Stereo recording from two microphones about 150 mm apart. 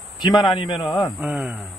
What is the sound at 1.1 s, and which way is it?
Speech, 5° right (ahead or behind).